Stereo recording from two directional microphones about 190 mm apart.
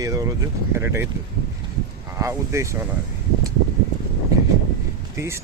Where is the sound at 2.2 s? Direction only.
15° right (ahead or behind).